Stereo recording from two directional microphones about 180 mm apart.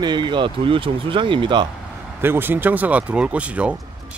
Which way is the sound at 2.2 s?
10° right (ahead or behind).